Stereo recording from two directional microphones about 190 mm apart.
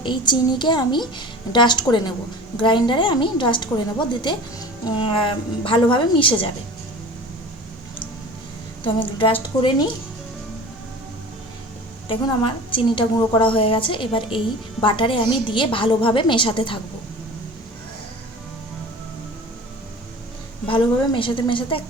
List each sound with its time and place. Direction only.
0.0 s a woman's voice: 25° left (ahead or behind)
8.8 s a woman's voice: 25° left (ahead or behind)
12.0 s a woman's voice: 25° left (ahead or behind)
20.7 s a woman's voice: 25° left (ahead or behind)